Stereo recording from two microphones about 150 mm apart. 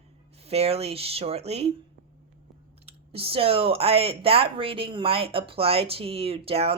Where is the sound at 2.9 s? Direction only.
40° right (ahead or behind).